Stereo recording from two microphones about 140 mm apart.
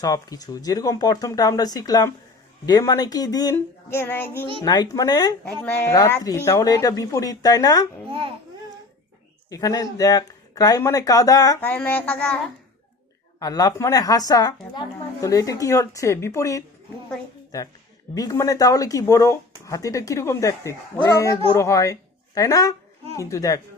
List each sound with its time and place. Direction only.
0.0 s a woman's voice: 25° left (ahead or behind)
4.6 s a woman's voice: 30° left (ahead or behind)
5.6 s a woman's voice: 15° left (ahead or behind)
8.1 s speech: 40° right (ahead or behind)
9.5 s a woman's voice: 25° left (ahead or behind)
11.6 s speech: 10° left (ahead or behind)
13.4 s a woman's voice: 25° left (ahead or behind)
18.1 s a woman's voice: 25° left (ahead or behind)